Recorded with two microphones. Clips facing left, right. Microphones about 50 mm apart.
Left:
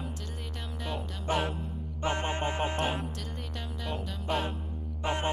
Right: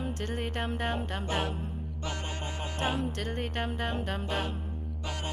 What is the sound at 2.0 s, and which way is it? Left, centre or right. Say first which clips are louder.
Music: left 8 dB; left.